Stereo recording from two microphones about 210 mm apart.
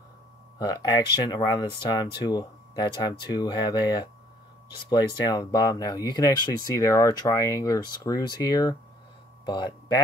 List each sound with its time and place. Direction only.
0.6 s speech: 15° left (ahead or behind)